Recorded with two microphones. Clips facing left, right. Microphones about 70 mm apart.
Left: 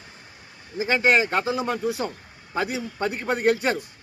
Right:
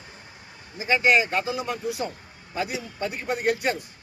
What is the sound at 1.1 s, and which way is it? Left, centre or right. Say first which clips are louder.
Speech: left 1 dB; left.